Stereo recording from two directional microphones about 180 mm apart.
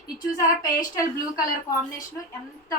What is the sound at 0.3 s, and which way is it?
Speech, 20° left (ahead or behind).